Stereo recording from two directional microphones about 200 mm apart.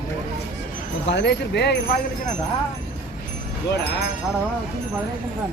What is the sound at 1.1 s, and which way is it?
Speech, 60° left (ahead or behind).